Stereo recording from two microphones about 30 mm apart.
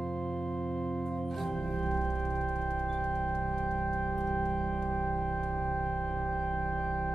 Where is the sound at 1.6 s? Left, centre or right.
Centre.